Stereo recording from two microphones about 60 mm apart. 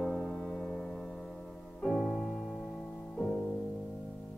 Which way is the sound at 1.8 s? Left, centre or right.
Centre.